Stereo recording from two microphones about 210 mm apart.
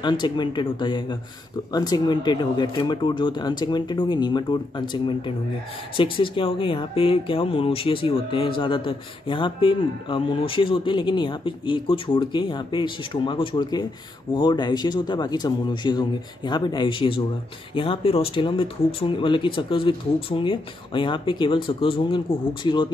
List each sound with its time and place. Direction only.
0.0 s speech: 20° left (ahead or behind)